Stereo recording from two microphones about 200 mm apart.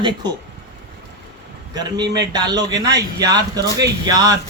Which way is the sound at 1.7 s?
20° right (ahead or behind).